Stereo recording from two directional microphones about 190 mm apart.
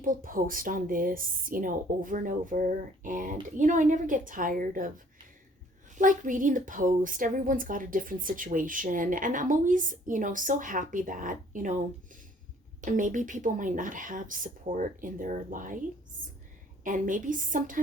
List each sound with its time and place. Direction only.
0.0 s speech: 45° right (ahead or behind)
6.0 s speech: 45° right (ahead or behind)
12.8 s speech: 45° right (ahead or behind)
16.8 s speech: 45° right (ahead or behind)